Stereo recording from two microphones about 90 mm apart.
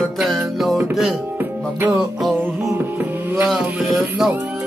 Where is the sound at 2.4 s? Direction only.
20° right (ahead or behind).